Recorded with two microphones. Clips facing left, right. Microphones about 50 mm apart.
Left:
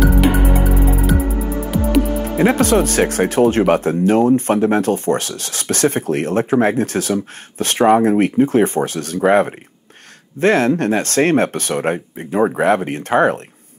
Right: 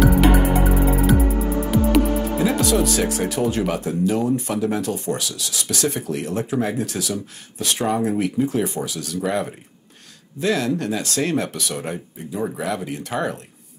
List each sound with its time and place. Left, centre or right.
1.7 s music: centre
2.3 s speech: left